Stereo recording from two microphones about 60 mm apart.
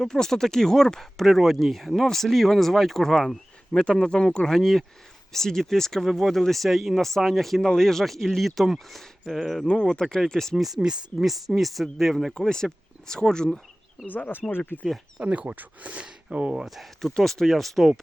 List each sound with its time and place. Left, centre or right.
0.0 s speech: centre
9.6 s speech: centre
10.8 s speech: centre
14.1 s speech: left
15.2 s speech: right
16.6 s speech: centre